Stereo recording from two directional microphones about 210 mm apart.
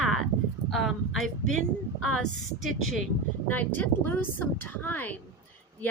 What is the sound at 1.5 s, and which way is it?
Speech, 90° left.